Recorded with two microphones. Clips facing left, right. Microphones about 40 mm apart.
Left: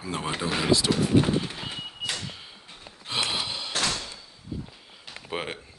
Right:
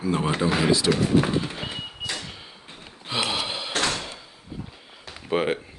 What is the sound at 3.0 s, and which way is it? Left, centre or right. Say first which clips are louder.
Gasp: right 2 dB; centre.